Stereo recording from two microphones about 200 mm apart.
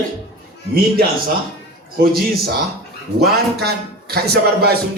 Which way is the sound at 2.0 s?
50° right (ahead or behind).